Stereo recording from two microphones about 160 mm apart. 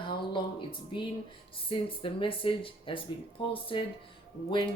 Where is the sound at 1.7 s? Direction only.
35° left (ahead or behind).